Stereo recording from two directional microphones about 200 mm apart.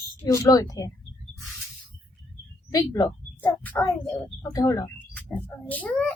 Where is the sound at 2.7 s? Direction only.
20° left (ahead or behind).